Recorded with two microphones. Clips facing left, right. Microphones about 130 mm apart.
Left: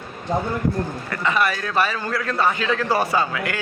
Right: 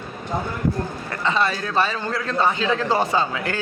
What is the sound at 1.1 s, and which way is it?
A man's voice, 25° right (ahead or behind).